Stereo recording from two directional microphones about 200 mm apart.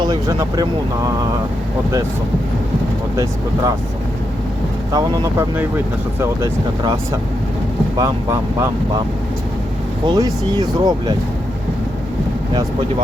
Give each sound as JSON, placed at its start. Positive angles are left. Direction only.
{"t": 0.0, "sound": "speech", "side_deg": -20}
{"t": 3.2, "sound": "speech", "side_deg": -15}
{"t": 4.9, "sound": "speech", "side_deg": -20}
{"t": 10.1, "sound": "speech", "side_deg": -20}